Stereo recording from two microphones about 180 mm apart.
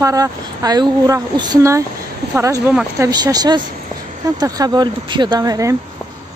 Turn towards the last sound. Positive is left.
turn(degrees=-20)  # may be behind; listen again after turning